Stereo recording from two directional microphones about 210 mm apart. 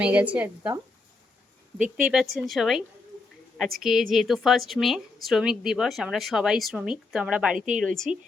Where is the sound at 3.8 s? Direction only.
Centre (ahead or behind).